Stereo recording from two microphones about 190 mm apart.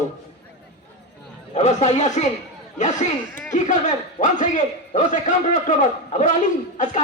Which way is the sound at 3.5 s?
40° left (ahead or behind).